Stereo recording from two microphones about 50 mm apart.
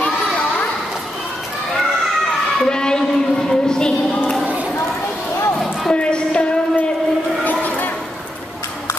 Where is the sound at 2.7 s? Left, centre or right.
Centre.